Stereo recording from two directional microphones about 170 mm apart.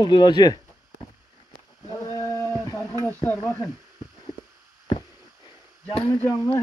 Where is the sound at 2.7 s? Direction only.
20° left (ahead or behind).